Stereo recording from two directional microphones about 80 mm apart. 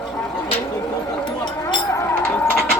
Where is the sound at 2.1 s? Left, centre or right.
Left.